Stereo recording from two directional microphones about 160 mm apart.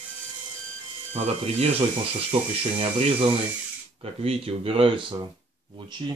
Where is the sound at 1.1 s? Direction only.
40° right (ahead or behind).